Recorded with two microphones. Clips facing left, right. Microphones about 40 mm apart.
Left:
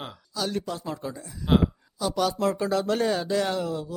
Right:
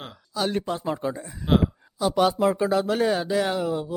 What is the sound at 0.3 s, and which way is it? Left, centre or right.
Speech, right.